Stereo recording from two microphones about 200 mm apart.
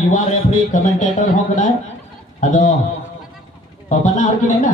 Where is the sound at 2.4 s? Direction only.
40° left (ahead or behind).